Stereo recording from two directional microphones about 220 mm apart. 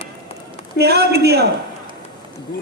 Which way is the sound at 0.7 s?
45° right (ahead or behind).